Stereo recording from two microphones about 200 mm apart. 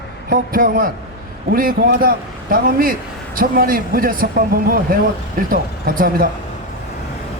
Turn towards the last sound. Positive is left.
turn(degrees=-45)  # may be behind; listen again after turning